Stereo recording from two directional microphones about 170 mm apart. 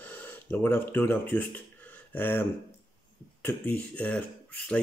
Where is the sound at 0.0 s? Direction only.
10° left (ahead or behind).